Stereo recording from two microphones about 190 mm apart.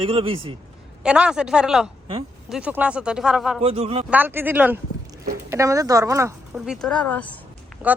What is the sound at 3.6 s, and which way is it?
Speech, 30° right (ahead or behind).